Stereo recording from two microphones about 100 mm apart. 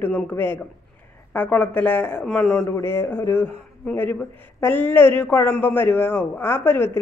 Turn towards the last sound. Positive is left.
turn(degrees=20)  # may be behind; listen again after turning